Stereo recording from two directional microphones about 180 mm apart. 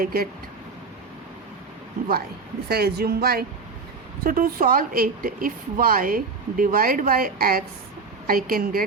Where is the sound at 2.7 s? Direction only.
60° right (ahead or behind).